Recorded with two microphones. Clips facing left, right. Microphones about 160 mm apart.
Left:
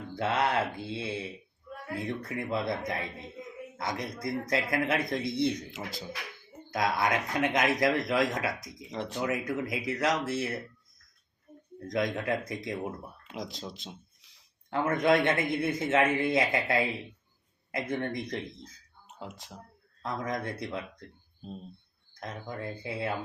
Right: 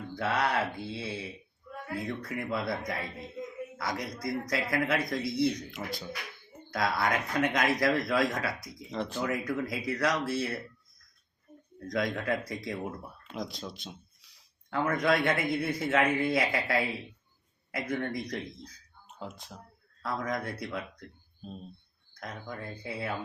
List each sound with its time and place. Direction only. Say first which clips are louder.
0.2 s speech: left 1 dB; 25° left (ahead or behind)
11.9 s speech: left 1 dB; 20° left (ahead or behind)
20.0 s speech: even; 20° left (ahead or behind)
22.2 s speech: left 2 dB; 25° left (ahead or behind)